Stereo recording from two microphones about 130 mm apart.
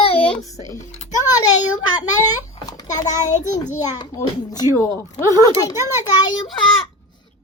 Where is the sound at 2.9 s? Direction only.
70° left (ahead or behind).